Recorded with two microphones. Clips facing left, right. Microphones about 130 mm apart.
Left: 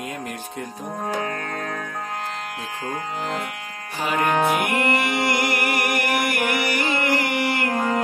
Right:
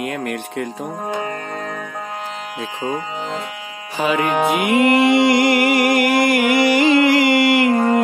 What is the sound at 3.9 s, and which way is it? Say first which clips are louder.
Music: right 6 dB; 90° right.